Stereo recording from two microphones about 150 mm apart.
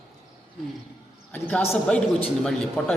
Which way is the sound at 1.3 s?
5° left (ahead or behind).